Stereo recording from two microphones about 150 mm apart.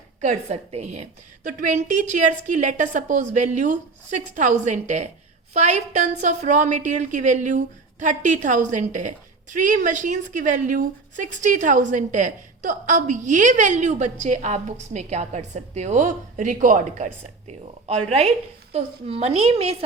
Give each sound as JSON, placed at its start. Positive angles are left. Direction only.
{"t": 0.2, "sound": "a woman's voice", "side_deg": -50}
{"t": 1.5, "sound": "a woman's voice", "side_deg": -60}
{"t": 17.5, "sound": "a woman's voice", "side_deg": -45}